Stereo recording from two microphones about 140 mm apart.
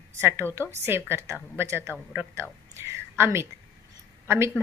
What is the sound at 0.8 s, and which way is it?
A woman's voice, 15° right (ahead or behind).